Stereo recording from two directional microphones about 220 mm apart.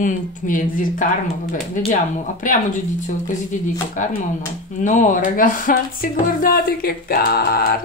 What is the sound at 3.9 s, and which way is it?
A woman's voice, 35° left (ahead or behind).